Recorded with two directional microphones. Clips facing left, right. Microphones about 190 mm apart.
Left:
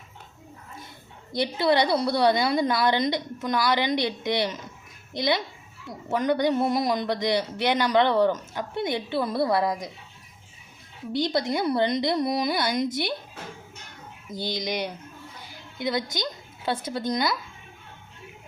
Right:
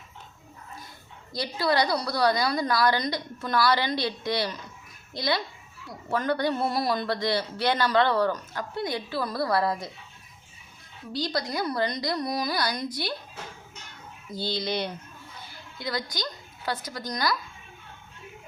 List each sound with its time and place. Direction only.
1.3 s speech: 25° left (ahead or behind)
11.1 s speech: 25° left (ahead or behind)
14.3 s a woman's voice: 20° left (ahead or behind)